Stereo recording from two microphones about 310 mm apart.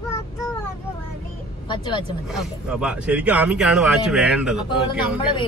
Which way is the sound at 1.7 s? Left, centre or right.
Centre.